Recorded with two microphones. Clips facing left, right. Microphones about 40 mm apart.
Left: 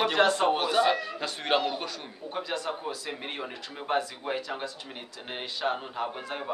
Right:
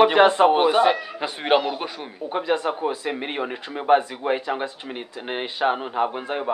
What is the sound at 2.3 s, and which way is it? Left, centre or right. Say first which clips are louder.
Speech: right 9 dB; right.